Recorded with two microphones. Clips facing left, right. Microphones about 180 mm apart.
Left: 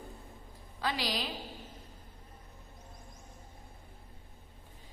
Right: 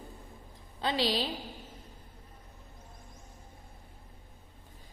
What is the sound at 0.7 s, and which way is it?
Speech, 25° right (ahead or behind).